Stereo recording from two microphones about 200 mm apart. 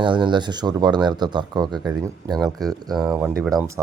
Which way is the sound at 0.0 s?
25° right (ahead or behind).